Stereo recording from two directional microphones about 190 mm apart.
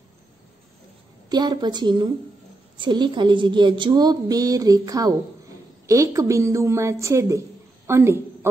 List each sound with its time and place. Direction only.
1.3 s a woman's voice: 20° right (ahead or behind)